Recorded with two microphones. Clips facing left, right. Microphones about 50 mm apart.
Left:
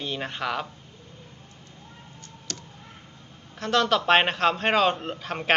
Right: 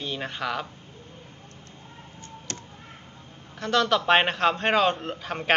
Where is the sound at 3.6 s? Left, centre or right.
Centre.